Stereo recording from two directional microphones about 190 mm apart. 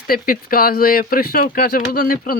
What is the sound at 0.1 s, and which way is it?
Speech, 50° left (ahead or behind).